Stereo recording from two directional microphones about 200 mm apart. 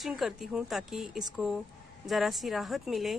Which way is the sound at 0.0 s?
Centre (ahead or behind).